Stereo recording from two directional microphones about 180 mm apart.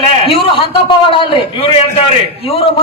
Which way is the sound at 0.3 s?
30° left (ahead or behind).